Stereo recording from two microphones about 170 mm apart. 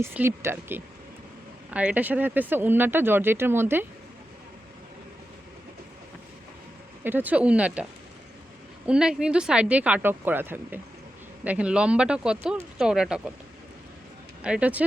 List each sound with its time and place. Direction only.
0.0 s speech: 15° right (ahead or behind)
7.0 s speech: 10° right (ahead or behind)
8.9 s speech: 5° right (ahead or behind)
14.4 s speech: 5° right (ahead or behind)